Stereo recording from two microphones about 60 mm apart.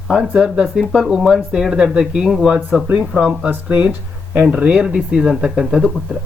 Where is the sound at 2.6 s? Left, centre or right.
Right; by 5.9 s centre.